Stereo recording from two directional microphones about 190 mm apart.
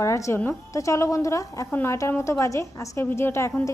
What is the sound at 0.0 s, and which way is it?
A woman's voice, 15° left (ahead or behind).